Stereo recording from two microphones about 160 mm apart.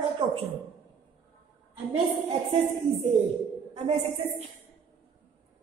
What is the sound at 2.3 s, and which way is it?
Speech, 40° right (ahead or behind).